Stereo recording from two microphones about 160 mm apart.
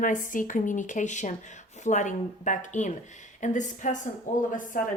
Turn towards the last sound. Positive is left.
turn(degrees=60)  # may be behind; listen again after turning